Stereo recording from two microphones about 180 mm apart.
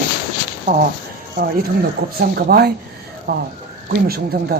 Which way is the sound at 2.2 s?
60° right (ahead or behind).